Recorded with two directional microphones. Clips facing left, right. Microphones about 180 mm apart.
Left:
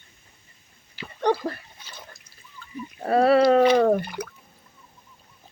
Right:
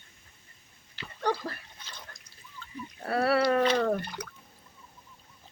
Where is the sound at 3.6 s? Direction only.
10° left (ahead or behind).